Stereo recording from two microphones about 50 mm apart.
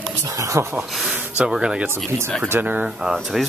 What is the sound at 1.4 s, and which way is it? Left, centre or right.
Speech, centre.